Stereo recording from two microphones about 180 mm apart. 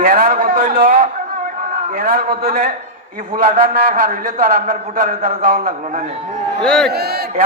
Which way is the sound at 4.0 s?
45° right (ahead or behind).